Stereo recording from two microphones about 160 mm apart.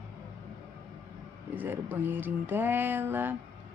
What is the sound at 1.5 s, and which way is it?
A woman's voice, 10° right (ahead or behind).